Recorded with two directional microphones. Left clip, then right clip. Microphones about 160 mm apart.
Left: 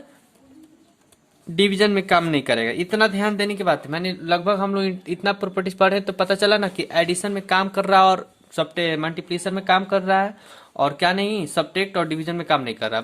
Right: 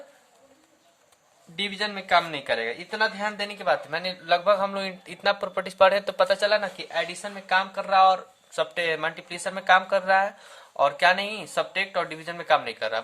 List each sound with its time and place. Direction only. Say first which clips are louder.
1.5 s speech: left 11 dB; 50° left (ahead or behind)
3.8 s speech: left 2 dB; 20° left (ahead or behind); by 6.2 s 5° left (ahead or behind)
6.2 s speech: left 5 dB; 20° left (ahead or behind)
6.5 s speech: left 5 dB; 40° left (ahead or behind)
8.5 s speech: left 3 dB; 25° left (ahead or behind)